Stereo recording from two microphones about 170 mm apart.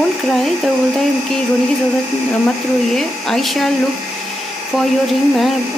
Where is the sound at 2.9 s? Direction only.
Centre (ahead or behind).